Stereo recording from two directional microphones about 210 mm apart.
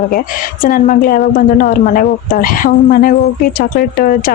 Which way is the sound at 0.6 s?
40° left (ahead or behind).